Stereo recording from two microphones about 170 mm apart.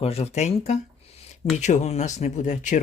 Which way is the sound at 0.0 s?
35° left (ahead or behind).